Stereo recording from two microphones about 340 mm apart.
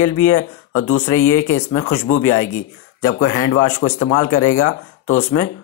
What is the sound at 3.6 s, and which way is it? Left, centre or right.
Speech, left.